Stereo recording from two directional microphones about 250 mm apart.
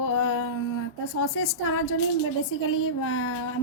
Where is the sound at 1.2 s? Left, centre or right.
Left.